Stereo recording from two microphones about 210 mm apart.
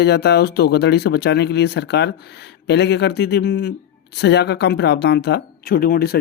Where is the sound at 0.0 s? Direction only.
50° left (ahead or behind).